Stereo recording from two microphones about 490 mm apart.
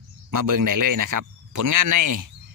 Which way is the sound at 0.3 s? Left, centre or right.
Right.